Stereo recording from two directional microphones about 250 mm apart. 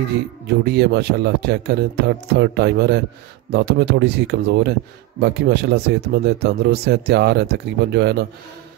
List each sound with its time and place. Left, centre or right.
0.7 s speech: right